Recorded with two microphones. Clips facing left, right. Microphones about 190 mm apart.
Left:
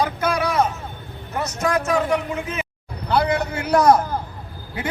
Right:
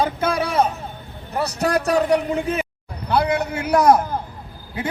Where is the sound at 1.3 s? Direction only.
35° right (ahead or behind).